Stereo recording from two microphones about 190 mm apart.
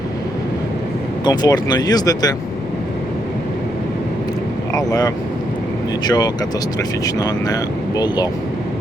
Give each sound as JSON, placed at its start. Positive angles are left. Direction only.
{"t": 1.2, "sound": "speech", "side_deg": 20}
{"t": 4.9, "sound": "speech", "side_deg": 20}